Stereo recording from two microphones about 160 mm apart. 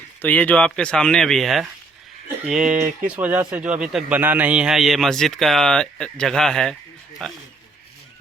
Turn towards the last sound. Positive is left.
turn(degrees=5)  # may be behind; listen again after turning